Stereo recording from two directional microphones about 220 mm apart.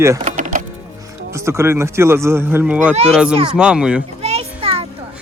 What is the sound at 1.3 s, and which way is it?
A man's voice, 10° right (ahead or behind).